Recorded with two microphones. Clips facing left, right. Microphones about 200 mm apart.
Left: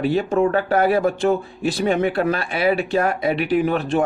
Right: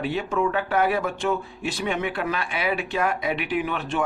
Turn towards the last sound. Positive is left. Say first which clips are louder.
# left 7 dB
turn(degrees=40)  # may be behind; listen again after turning